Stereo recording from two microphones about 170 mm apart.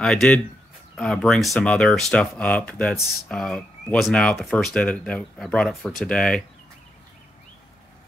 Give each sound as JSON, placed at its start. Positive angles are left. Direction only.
{"t": 0.0, "sound": "speech", "side_deg": 5}